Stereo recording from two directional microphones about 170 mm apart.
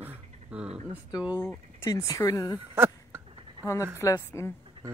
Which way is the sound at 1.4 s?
15° left (ahead or behind).